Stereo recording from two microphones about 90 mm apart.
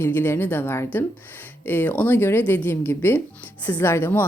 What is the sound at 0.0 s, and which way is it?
Speech, 25° left (ahead or behind).